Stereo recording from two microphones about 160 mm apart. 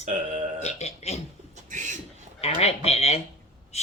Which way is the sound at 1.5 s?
50° right (ahead or behind).